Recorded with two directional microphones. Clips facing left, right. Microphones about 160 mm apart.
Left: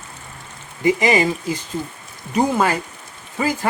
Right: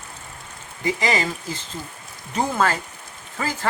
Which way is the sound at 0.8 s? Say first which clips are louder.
Left 6 dB; 20° left (ahead or behind).